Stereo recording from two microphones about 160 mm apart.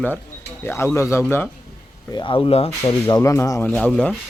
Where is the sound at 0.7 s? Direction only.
15° left (ahead or behind).